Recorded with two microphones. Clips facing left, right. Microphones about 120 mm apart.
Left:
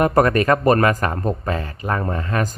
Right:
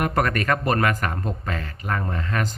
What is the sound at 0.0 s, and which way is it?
Speech, 35° left (ahead or behind).